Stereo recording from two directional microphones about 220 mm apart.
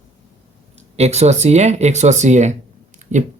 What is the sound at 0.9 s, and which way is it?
Speech, 30° right (ahead or behind).